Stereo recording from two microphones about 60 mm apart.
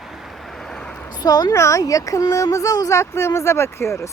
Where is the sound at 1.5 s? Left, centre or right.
Left.